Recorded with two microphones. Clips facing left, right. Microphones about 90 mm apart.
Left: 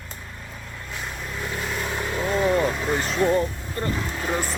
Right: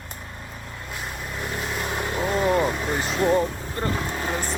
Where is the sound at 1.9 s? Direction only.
15° right (ahead or behind).